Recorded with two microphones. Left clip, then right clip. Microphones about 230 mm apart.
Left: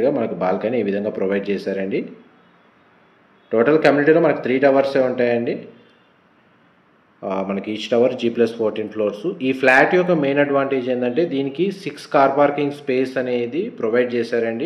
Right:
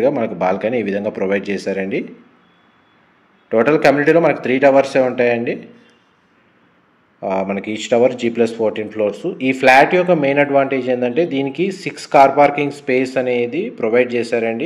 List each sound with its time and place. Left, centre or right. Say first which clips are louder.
0.0 s speech: right 3 dB; right
3.4 s speech: right 2 dB; right
7.2 s speech: right 4 dB; right